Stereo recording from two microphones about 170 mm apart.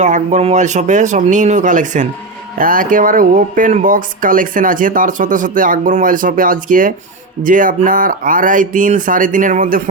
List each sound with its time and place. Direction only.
0.0 s speech: 45° right (ahead or behind)